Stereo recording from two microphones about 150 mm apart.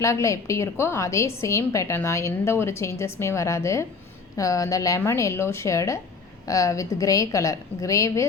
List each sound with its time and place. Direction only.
0.0 s a woman's voice: 20° left (ahead or behind)